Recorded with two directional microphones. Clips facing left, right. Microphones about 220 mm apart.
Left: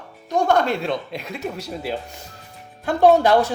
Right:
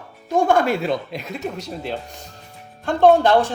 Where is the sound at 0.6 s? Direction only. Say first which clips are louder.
Right 2 dB; 5° right (ahead or behind).